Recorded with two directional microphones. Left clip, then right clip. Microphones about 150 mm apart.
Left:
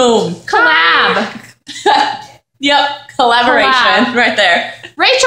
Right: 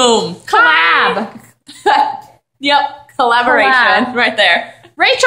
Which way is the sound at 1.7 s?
20° left (ahead or behind).